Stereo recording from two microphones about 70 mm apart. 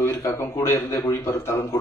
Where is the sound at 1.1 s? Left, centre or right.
Left.